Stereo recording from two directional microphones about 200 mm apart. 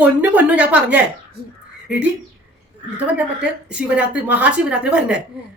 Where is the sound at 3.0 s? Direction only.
5° right (ahead or behind).